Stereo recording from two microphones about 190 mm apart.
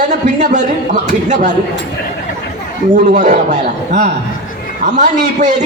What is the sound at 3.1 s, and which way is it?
A man's voice, 40° right (ahead or behind).